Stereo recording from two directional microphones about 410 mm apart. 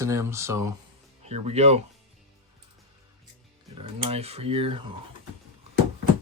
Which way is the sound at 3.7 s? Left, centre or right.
Centre.